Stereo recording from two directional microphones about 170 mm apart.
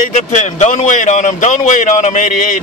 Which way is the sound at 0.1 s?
45° left (ahead or behind).